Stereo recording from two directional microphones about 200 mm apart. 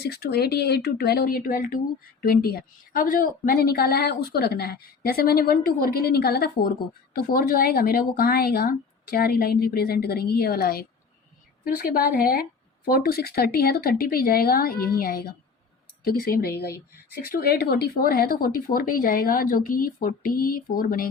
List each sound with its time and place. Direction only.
0.0 s a woman's voice: 55° left (ahead or behind)